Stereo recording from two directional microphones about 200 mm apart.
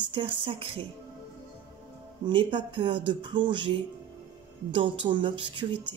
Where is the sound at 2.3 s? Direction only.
25° right (ahead or behind).